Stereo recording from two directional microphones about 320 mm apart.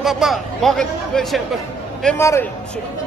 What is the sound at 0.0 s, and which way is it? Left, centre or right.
Speech, centre.